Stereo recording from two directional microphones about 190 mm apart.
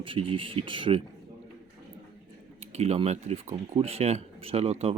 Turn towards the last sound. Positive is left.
turn(degrees=-35)  # may be behind; listen again after turning